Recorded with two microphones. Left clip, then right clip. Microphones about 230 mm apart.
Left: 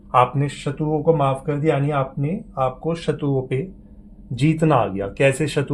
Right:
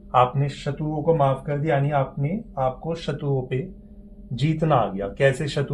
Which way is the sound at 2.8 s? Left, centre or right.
Left.